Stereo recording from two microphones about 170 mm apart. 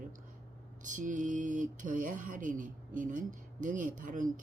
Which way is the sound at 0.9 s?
50° right (ahead or behind).